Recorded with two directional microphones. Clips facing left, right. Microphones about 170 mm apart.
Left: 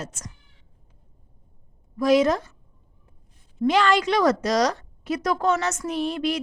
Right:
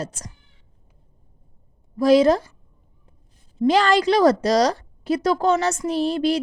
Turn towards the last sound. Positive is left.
turn(degrees=-35)  # may be behind; listen again after turning